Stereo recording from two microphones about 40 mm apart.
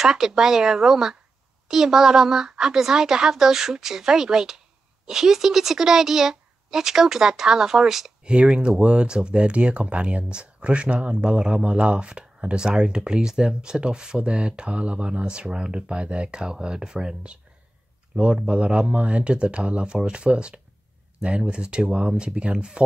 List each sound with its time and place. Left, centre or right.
0.0 s a woman's voice: centre
8.2 s speech: right